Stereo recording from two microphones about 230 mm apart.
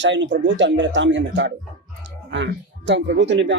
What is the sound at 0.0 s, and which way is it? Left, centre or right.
A man's voice, right.